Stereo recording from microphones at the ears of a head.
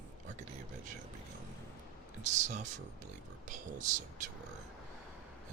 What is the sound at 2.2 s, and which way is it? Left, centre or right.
Speech, right.